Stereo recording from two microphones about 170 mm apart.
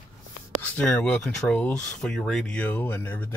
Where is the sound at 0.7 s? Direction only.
5° left (ahead or behind).